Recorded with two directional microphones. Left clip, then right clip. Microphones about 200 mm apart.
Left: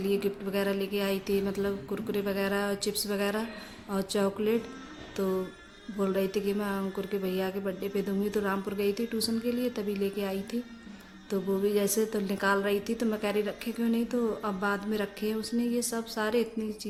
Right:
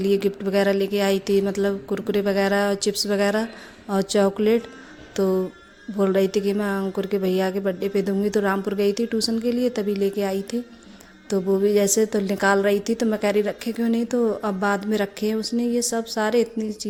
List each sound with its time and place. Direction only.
0.0 s a woman's voice: 35° right (ahead or behind)